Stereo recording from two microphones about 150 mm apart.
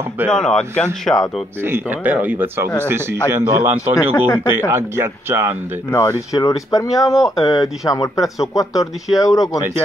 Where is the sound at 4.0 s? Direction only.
25° left (ahead or behind).